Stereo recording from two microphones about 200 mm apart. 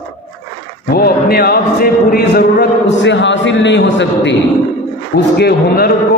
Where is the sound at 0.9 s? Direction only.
50° left (ahead or behind).